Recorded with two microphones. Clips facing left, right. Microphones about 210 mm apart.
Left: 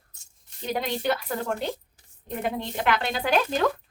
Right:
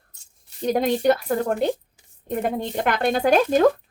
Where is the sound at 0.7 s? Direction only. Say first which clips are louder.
Right 8 dB; 45° right (ahead or behind).